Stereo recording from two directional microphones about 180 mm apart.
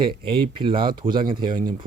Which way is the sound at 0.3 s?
30° right (ahead or behind).